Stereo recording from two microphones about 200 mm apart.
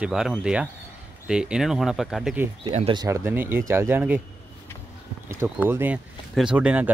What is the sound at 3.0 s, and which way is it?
Speech, 15° right (ahead or behind).